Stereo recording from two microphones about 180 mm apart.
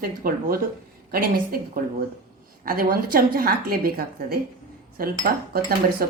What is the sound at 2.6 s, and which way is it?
A woman's voice, 55° right (ahead or behind).